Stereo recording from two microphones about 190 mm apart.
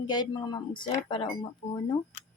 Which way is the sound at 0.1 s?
20° left (ahead or behind).